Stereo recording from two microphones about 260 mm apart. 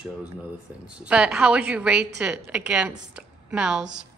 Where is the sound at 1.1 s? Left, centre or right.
Centre.